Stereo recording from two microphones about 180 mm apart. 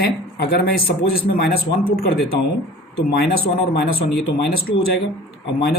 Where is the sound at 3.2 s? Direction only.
60° left (ahead or behind).